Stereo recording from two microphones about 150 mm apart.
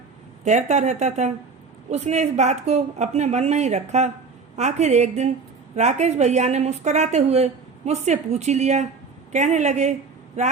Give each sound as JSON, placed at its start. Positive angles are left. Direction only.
{"t": 0.4, "sound": "a woman's voice", "side_deg": -50}